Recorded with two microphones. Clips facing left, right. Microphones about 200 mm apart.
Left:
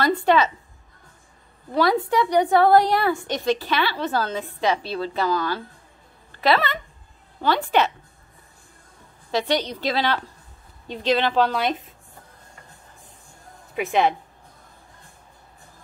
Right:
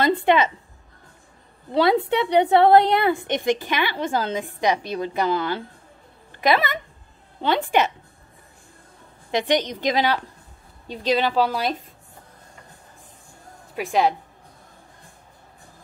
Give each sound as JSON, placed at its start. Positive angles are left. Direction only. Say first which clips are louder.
{"t": 0.2, "sound": "a woman's voice", "louder": "even", "side_deg": -20}
{"t": 1.7, "sound": "a woman's voice", "louder": "right 2 dB", "side_deg": -25}
{"t": 7.4, "sound": "a woman's voice", "louder": "even", "side_deg": -25}
{"t": 9.3, "sound": "a woman's voice", "louder": "right 1 dB", "side_deg": -15}
{"t": 13.7, "sound": "speech", "louder": "even", "side_deg": 0}